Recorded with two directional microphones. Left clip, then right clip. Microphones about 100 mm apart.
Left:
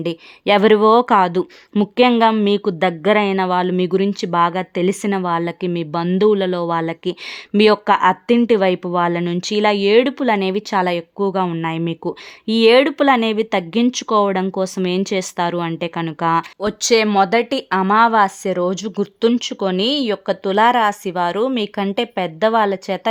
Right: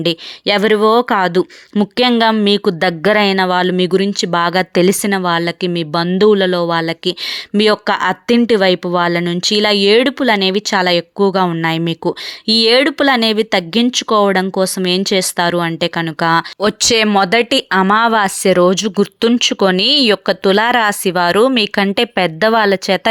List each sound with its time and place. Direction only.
0.4 s speech: centre (ahead or behind)
1.2 s speech: 25° right (ahead or behind)
5.0 s speech: 20° right (ahead or behind); by 23.0 s 35° right (ahead or behind)